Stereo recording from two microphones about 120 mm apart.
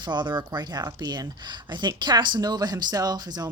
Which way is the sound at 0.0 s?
35° right (ahead or behind).